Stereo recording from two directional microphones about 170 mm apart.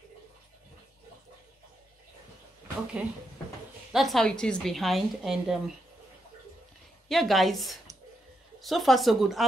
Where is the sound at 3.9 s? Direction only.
Centre (ahead or behind).